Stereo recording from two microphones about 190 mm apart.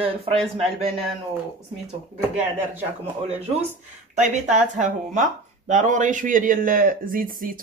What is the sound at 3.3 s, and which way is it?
Speech, 35° right (ahead or behind).